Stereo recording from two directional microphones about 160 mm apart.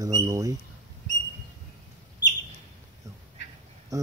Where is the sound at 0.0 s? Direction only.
20° right (ahead or behind).